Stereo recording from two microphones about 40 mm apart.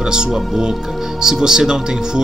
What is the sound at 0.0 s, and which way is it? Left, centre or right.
Speech, centre.